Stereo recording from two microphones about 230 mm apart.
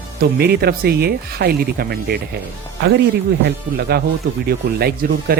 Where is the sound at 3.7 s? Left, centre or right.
Right.